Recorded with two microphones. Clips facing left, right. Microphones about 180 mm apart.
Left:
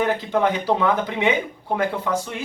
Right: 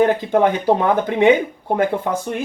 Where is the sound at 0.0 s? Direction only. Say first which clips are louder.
Right 5 dB; 50° right (ahead or behind).